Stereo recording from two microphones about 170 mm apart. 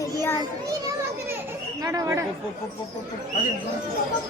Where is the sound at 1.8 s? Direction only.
20° right (ahead or behind).